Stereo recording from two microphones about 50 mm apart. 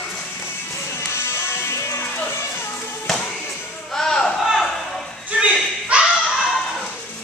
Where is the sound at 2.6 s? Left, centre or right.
Left.